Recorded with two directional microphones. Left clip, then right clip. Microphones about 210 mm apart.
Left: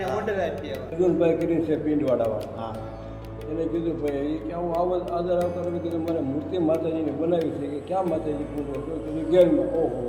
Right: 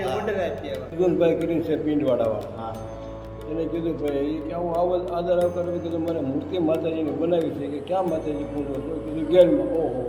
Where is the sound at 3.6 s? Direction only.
30° right (ahead or behind).